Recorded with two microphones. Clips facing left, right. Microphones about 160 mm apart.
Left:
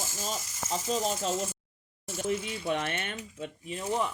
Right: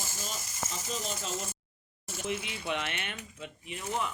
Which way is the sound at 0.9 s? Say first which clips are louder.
Left 8 dB; 40° left (ahead or behind).